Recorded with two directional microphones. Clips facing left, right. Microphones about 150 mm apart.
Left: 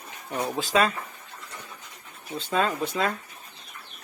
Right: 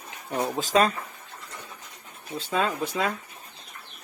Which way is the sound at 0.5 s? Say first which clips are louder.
Right 1 dB; 40° right (ahead or behind).